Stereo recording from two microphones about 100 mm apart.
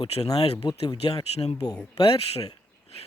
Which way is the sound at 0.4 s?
85° left.